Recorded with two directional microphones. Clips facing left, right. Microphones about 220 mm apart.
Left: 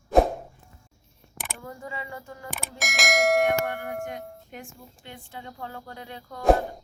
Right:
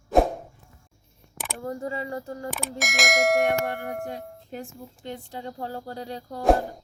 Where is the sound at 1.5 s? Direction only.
40° right (ahead or behind).